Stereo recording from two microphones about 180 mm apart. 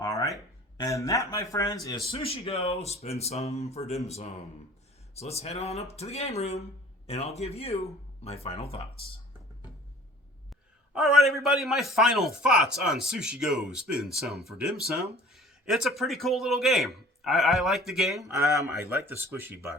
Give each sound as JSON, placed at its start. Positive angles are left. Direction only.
{"t": 0.0, "sound": "a sound", "side_deg": 20}
{"t": 0.8, "sound": "speech", "side_deg": 20}
{"t": 2.0, "sound": "speech", "side_deg": 35}
{"t": 10.9, "sound": "a man's voice", "side_deg": 0}